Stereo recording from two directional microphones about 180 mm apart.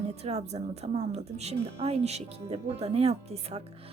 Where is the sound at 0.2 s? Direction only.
35° right (ahead or behind).